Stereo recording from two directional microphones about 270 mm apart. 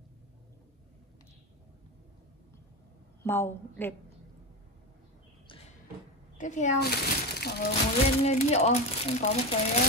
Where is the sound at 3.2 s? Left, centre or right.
Centre.